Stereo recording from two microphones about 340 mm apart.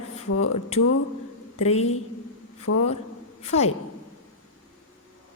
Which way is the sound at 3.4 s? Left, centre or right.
Centre.